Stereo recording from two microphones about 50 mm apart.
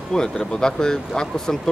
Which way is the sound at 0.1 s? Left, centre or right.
Centre.